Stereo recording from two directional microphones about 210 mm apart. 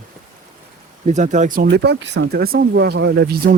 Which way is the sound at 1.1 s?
35° right (ahead or behind).